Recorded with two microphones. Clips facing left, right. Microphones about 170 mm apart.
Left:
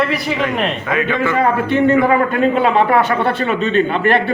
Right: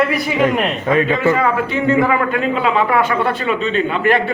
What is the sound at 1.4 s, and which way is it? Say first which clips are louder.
Speech: left 3 dB; 45° left (ahead or behind).